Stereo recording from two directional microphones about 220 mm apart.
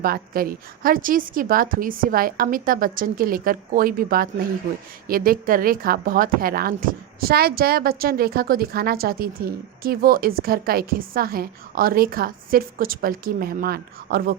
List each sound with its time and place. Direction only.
0.0 s a woman's voice: 40° right (ahead or behind)